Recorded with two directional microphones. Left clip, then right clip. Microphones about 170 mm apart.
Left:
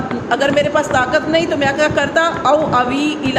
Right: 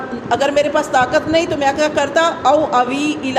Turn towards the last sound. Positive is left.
turn(degrees=-30)  # may be behind; listen again after turning